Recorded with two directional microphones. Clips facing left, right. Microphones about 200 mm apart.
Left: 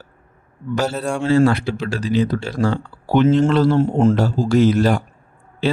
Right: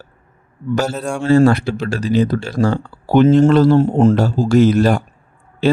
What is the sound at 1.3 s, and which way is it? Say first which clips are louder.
Speech: right 4 dB; 45° right (ahead or behind).